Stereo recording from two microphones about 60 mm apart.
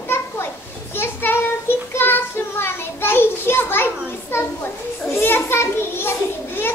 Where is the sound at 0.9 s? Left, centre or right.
Left.